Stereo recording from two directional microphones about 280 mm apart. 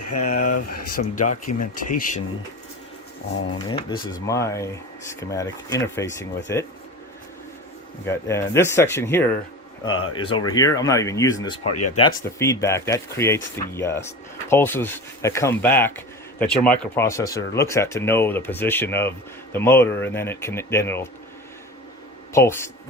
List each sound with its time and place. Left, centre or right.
0.3 s speech: left
1.3 s speech: left
3.7 s speech: centre
8.0 s speech: centre
11.6 s speech: left
12.2 s speech: centre
22.3 s speech: centre